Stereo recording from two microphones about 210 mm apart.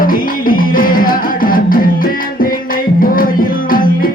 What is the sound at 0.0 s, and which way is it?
Music, 40° left (ahead or behind).